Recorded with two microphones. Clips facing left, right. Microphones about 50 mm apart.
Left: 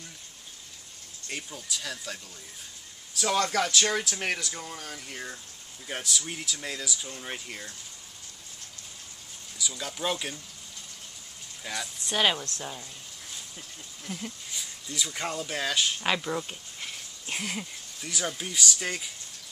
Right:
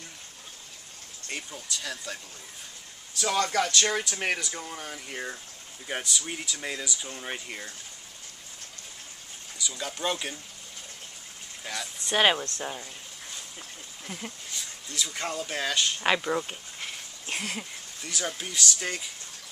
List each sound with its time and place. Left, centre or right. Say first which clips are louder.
1.3 s speech: even; centre
3.2 s speech: even; centre
9.6 s speech: right 1 dB; centre
11.6 s speech: left 1 dB; centre
12.2 s speech: right 3 dB; centre
14.0 s speech: left 1 dB; centre
14.5 s a sound: even; centre
15.0 s speech: right 1 dB; centre
16.0 s speech: right 3 dB; centre
17.3 s speech: even; centre